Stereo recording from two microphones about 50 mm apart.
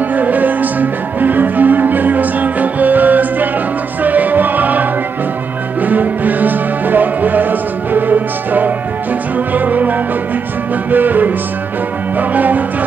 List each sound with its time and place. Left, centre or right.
0.1 s music: right